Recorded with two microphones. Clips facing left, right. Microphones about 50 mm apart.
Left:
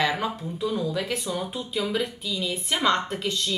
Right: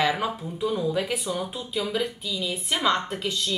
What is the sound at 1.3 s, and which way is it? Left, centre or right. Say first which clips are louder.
Speech: even; centre.